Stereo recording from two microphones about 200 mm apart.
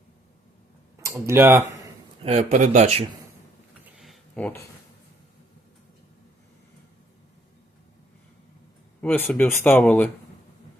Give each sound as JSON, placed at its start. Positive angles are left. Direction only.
{"t": 1.0, "sound": "speech", "side_deg": -15}
{"t": 2.2, "sound": "speech", "side_deg": -35}
{"t": 3.9, "sound": "a sound", "side_deg": 0}
{"t": 9.0, "sound": "speech", "side_deg": 10}